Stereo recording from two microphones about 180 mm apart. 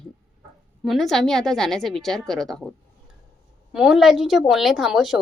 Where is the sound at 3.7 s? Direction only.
5° right (ahead or behind).